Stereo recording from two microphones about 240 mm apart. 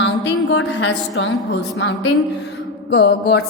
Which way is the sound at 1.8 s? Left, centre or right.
Left.